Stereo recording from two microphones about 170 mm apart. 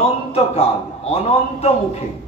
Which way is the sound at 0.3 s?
35° left (ahead or behind).